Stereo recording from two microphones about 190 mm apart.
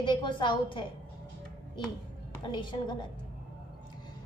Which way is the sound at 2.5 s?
25° left (ahead or behind).